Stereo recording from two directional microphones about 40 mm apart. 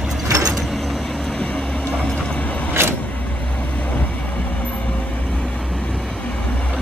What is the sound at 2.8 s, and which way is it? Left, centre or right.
Vehicle, right.